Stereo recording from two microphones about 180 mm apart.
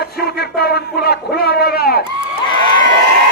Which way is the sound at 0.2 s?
60° left (ahead or behind).